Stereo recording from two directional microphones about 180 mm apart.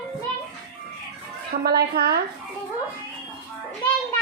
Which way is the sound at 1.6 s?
60° right (ahead or behind).